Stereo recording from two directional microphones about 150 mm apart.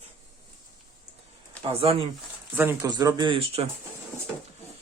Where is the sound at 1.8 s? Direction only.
40° right (ahead or behind).